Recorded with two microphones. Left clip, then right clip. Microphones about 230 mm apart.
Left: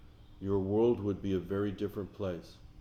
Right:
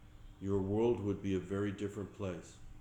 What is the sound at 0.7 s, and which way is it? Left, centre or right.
Speech, left.